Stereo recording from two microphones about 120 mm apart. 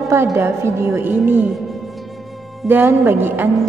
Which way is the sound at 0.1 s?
25° right (ahead or behind).